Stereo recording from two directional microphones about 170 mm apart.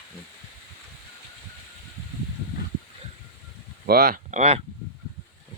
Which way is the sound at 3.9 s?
60° right (ahead or behind).